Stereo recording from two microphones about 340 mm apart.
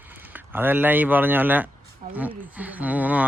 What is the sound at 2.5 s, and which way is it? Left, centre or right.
Speech, centre.